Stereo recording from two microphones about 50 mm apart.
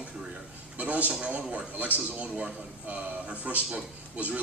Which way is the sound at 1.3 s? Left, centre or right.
Right.